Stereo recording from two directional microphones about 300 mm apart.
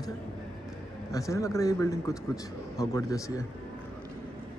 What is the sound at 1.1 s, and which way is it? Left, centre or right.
A man's voice, centre.